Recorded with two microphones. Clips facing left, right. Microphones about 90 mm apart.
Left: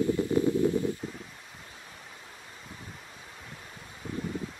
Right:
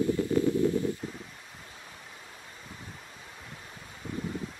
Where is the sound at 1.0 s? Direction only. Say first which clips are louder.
Even; centre (ahead or behind).